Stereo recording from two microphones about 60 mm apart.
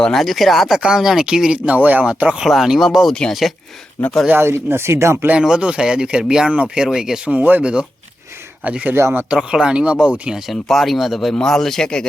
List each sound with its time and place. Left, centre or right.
0.0 s speech: centre
0.8 s speech: centre
1.5 s speech: right
2.5 s speech: centre
3.1 s speech: centre
4.0 s speech: left
4.4 s speech: right
5.4 s speech: centre
7.3 s speech: right
10.3 s speech: centre